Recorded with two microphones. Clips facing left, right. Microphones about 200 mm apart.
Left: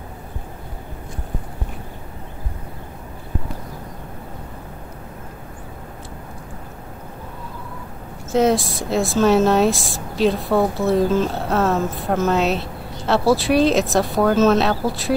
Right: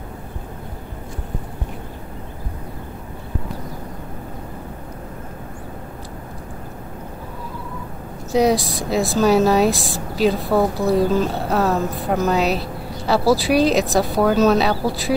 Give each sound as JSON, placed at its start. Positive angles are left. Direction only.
{"t": 8.3, "sound": "speech", "side_deg": 0}